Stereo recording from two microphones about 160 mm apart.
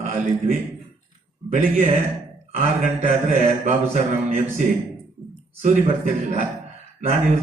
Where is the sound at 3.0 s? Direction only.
45° right (ahead or behind).